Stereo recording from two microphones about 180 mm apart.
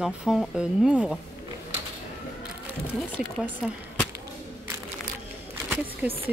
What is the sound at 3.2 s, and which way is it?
Speech, centre (ahead or behind).